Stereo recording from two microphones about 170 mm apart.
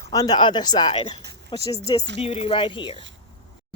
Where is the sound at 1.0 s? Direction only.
30° left (ahead or behind).